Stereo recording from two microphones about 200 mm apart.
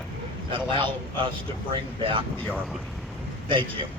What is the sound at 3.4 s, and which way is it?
Speech, 25° right (ahead or behind).